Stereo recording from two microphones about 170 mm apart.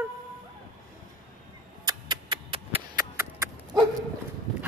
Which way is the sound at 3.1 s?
20° right (ahead or behind).